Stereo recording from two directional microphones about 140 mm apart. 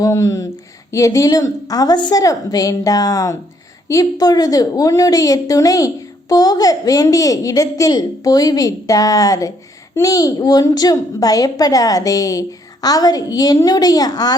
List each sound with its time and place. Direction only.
0.0 s a woman's voice: 20° left (ahead or behind)